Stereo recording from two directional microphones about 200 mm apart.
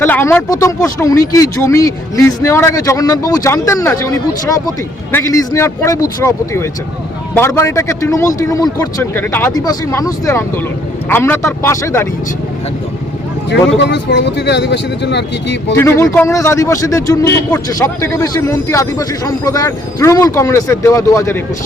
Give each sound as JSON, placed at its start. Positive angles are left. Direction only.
{"t": 0.0, "sound": "a man's voice", "side_deg": 10}
{"t": 13.5, "sound": "speech", "side_deg": 65}
{"t": 15.7, "sound": "a man's voice", "side_deg": 15}